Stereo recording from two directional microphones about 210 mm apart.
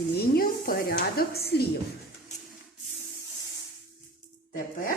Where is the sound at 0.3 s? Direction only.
45° left (ahead or behind).